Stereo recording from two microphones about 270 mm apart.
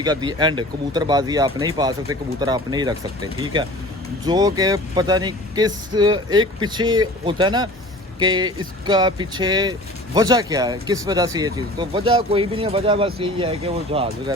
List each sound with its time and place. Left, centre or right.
0.0 s speech: centre